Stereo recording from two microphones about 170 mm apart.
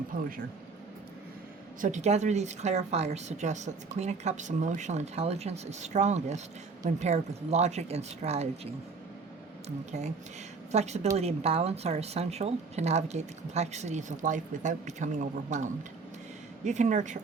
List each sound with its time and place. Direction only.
1.8 s a woman's voice: 45° right (ahead or behind)